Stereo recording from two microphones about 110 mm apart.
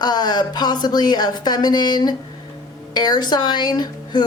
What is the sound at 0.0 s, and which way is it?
A woman's voice, 40° left (ahead or behind).